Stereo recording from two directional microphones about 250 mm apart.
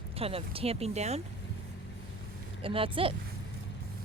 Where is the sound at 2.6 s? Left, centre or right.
Right.